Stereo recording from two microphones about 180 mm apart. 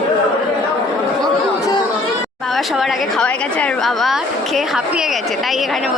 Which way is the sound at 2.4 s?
Centre (ahead or behind).